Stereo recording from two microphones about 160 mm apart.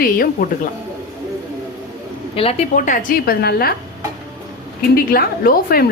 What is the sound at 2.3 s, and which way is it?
Speech, 35° left (ahead or behind).